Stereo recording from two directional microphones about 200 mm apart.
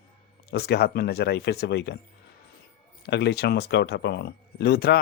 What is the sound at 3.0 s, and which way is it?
Speech, 55° left (ahead or behind).